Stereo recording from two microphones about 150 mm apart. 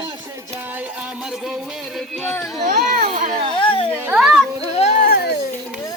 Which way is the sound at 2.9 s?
65° right (ahead or behind).